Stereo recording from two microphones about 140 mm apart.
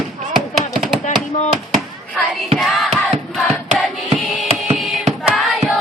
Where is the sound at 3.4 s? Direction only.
Centre (ahead or behind).